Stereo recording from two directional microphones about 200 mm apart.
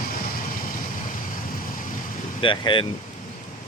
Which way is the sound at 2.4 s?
25° left (ahead or behind).